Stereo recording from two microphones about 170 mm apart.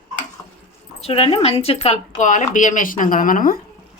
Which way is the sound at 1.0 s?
35° left (ahead or behind).